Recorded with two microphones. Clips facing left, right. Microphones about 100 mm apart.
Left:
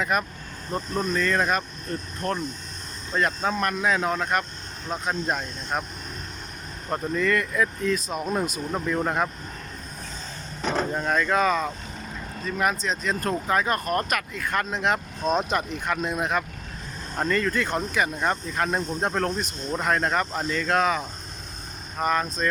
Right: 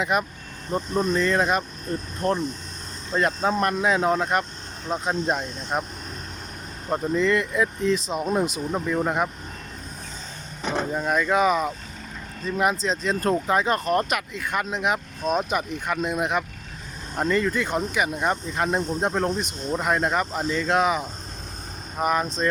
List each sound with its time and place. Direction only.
0.0 s speech: 15° right (ahead or behind)
3.2 s speech: 25° right (ahead or behind)
6.9 s speech: 20° right (ahead or behind)
10.6 s vehicle: 15° right (ahead or behind)
10.8 s speech: 5° right (ahead or behind)